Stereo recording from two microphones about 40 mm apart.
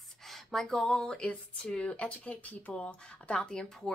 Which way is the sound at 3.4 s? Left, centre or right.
Centre.